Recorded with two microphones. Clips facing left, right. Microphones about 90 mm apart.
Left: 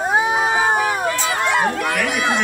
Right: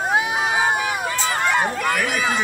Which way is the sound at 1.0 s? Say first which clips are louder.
Left 2 dB; centre (ahead or behind).